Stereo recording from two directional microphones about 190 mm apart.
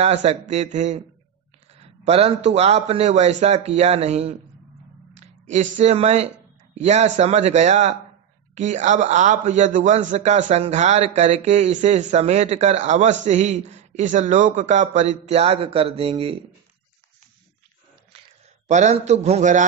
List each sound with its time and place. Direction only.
0.0 s a man's voice: 35° right (ahead or behind)
18.7 s a man's voice: 40° right (ahead or behind)